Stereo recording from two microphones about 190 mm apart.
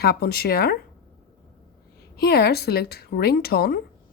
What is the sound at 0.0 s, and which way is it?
Speech, 55° left (ahead or behind).